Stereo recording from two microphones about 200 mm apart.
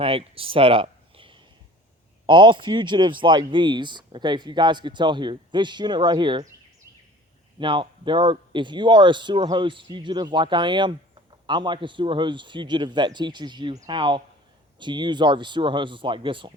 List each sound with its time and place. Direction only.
0.0 s speech: 30° right (ahead or behind)
7.6 s speech: 25° right (ahead or behind)